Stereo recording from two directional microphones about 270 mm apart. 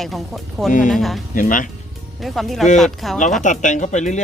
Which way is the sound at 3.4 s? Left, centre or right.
Left.